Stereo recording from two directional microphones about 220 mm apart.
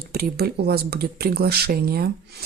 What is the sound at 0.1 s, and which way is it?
Speech, 45° right (ahead or behind).